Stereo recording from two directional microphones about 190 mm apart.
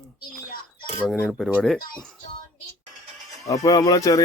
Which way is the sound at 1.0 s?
5° left (ahead or behind).